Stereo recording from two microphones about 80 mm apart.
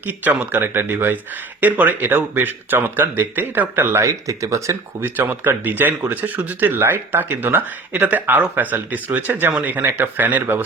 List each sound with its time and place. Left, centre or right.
0.0 s speech: centre
4.1 s speech: right
5.0 s speech: right